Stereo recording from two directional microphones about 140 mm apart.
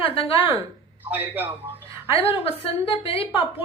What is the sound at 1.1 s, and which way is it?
Speech, 10° right (ahead or behind).